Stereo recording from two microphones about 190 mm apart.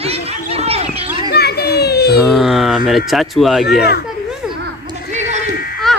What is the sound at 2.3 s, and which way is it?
Speech, centre (ahead or behind).